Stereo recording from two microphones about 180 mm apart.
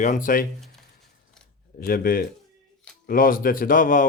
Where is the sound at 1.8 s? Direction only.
55° left (ahead or behind).